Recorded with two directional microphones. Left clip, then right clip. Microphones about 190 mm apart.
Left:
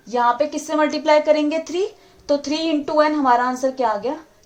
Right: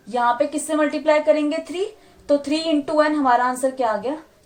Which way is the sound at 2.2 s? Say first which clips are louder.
Right 1 dB; 25° left (ahead or behind).